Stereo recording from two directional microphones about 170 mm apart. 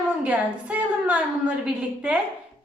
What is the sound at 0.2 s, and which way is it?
A woman's voice, 10° right (ahead or behind).